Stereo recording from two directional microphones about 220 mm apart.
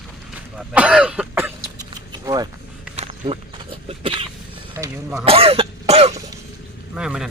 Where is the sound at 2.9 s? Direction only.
25° right (ahead or behind).